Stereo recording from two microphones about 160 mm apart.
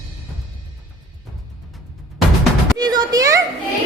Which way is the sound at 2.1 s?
Centre (ahead or behind).